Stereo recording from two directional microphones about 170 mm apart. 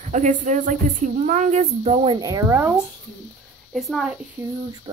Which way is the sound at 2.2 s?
20° right (ahead or behind).